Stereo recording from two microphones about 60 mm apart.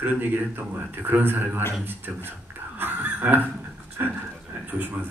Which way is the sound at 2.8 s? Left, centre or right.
Right.